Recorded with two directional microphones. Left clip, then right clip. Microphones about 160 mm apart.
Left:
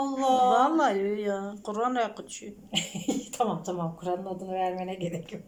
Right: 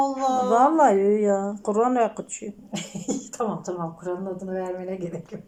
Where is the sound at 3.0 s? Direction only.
10° left (ahead or behind).